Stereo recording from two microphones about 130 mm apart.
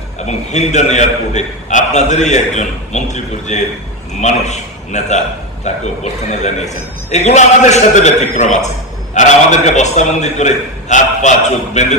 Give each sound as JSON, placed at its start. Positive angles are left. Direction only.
{"t": 0.3, "sound": "a man's voice", "side_deg": 65}